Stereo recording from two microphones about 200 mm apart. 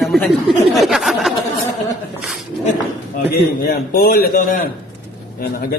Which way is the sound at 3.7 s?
50° left (ahead or behind).